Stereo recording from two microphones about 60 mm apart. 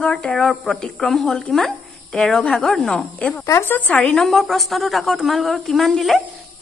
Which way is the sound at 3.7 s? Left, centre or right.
Left.